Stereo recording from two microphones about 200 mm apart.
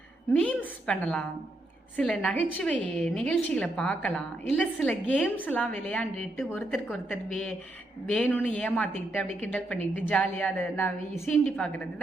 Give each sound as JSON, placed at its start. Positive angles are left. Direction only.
{"t": 0.3, "sound": "a woman's voice", "side_deg": 5}